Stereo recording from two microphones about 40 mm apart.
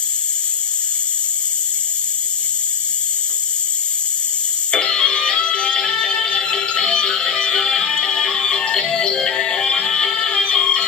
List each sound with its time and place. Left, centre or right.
4.6 s music: left